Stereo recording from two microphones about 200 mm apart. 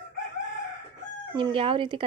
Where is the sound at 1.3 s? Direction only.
25° right (ahead or behind).